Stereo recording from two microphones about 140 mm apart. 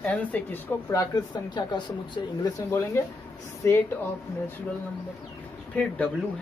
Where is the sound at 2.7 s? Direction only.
20° left (ahead or behind).